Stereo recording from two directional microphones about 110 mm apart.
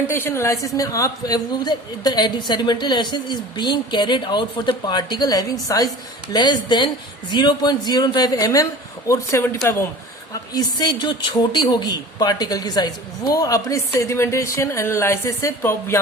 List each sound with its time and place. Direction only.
0.1 s speech: 20° left (ahead or behind)
10.5 s speech: 40° left (ahead or behind)